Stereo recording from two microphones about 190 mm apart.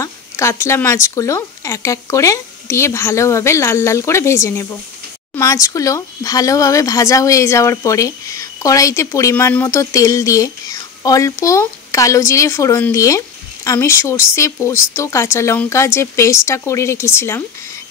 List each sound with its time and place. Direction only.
0.0 s speech: 15° left (ahead or behind)